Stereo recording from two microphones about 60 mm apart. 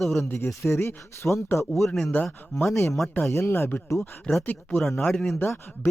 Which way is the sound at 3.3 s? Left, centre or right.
Left.